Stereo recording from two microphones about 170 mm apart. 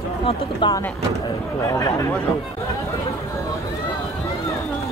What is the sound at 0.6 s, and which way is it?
Speech, 30° left (ahead or behind).